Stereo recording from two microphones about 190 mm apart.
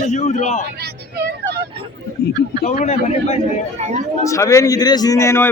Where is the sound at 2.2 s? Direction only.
55° left (ahead or behind).